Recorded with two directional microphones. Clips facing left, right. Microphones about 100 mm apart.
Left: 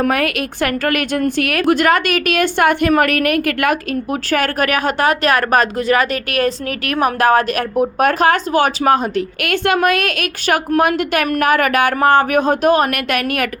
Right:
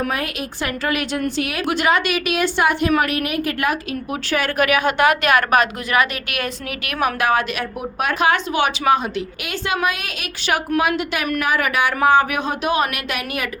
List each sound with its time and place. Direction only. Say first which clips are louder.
0.0 s a woman's voice: left 7 dB; 65° left (ahead or behind)
4.1 s a woman's voice: left 3 dB; 45° left (ahead or behind)